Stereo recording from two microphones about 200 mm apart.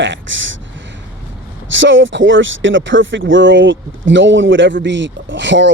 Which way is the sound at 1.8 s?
70° right (ahead or behind).